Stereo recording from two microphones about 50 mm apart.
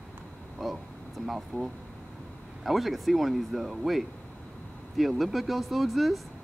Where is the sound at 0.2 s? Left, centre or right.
Centre.